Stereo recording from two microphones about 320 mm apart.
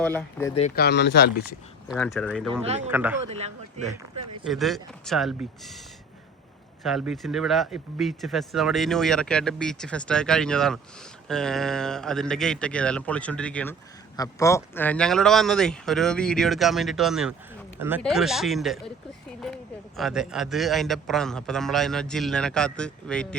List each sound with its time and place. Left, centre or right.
0.0 s speech: centre
0.5 s speech: left
1.9 s speech: centre
2.5 s speech: centre
2.9 s speech: centre
3.2 s speech: centre
4.1 s speech: right
4.4 s speech: centre
6.8 s speech: centre
20.0 s speech: centre